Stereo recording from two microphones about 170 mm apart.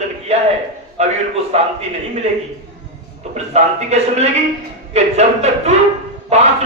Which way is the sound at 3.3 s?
40° right (ahead or behind).